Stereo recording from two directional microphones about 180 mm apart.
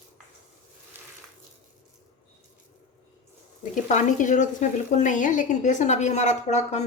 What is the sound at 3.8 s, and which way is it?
A woman's voice, 45° left (ahead or behind).